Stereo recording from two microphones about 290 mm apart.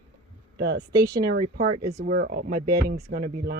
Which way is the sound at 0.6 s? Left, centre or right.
Right.